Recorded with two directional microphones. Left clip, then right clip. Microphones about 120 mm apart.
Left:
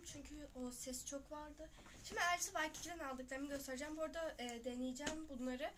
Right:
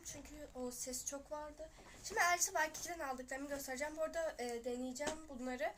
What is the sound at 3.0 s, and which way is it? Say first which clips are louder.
Speech: right 3 dB; 10° left (ahead or behind).